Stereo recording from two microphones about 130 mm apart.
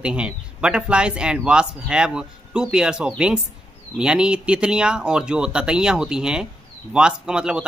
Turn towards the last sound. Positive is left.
turn(degrees=-5)  # may be behind; listen again after turning